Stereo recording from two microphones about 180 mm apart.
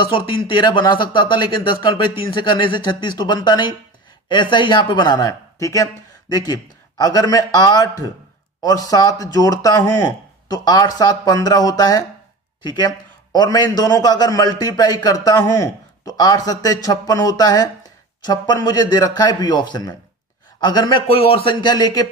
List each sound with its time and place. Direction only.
0.1 s a man's voice: 25° left (ahead or behind)